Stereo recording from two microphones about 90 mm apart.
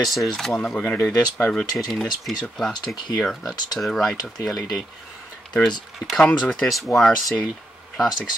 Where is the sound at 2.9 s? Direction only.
55° left (ahead or behind).